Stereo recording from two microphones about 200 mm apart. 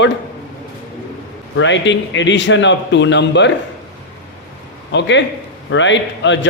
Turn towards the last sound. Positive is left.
turn(degrees=65)  # may be behind; listen again after turning